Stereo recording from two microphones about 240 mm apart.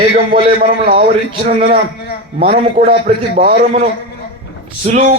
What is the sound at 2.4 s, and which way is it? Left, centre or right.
A man's voice, right.